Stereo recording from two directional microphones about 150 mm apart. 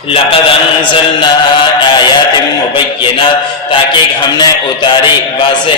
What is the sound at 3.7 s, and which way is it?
A man's voice, 30° left (ahead or behind).